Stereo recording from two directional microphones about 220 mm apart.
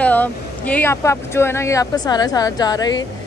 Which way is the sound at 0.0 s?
5° left (ahead or behind).